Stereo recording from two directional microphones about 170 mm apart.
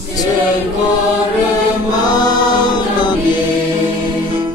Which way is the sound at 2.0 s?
25° left (ahead or behind).